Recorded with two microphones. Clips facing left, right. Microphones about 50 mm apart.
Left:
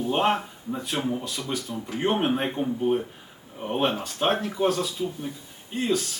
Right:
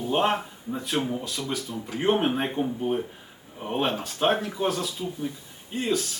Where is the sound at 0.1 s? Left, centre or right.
Centre.